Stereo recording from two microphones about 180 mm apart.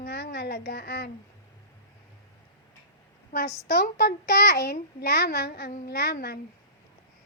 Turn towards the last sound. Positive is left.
turn(degrees=60)  # may be behind; listen again after turning